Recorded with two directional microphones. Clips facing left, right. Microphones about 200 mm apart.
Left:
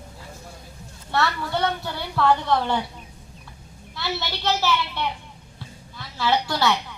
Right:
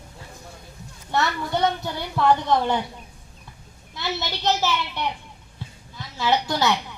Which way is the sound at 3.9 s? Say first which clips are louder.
Even; 20° right (ahead or behind).